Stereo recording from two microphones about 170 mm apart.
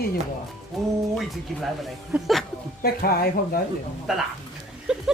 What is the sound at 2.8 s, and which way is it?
Speech, 65° left (ahead or behind).